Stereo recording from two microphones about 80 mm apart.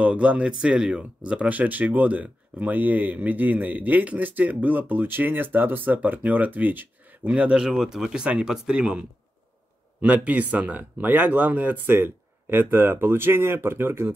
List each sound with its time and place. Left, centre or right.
0.0 s speech: centre
10.0 s speech: right